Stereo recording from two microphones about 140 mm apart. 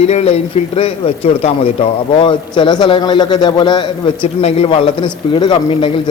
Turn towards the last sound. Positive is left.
turn(degrees=35)  # may be behind; listen again after turning